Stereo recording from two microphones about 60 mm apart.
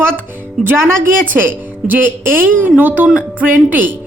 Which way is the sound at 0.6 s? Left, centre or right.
Centre.